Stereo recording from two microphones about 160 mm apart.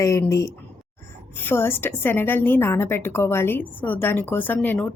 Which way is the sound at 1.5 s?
15° left (ahead or behind).